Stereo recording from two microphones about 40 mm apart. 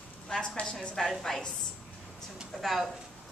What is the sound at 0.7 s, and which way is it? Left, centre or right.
Speech, left.